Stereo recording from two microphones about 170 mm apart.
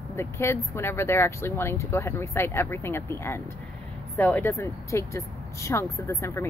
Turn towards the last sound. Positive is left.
turn(degrees=15)  # may be behind; listen again after turning